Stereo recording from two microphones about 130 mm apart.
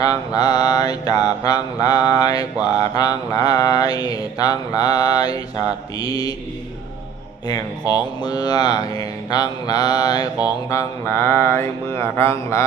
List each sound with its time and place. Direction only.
0.0 s music: 30° left (ahead or behind)
2.6 s mantra: 30° left (ahead or behind)
7.4 s music: 30° left (ahead or behind)
10.7 s mantra: 20° left (ahead or behind)